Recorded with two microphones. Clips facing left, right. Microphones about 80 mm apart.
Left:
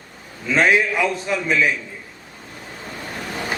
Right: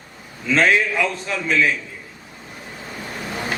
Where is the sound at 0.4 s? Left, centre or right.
Centre.